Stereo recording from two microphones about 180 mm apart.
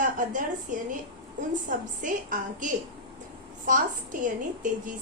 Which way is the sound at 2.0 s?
45° right (ahead or behind).